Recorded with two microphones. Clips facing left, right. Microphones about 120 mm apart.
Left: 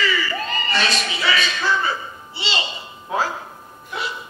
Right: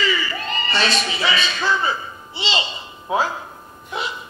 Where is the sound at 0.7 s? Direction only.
30° right (ahead or behind).